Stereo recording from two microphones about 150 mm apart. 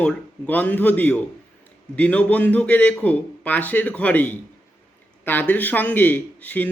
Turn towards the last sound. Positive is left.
turn(degrees=10)  # may be behind; listen again after turning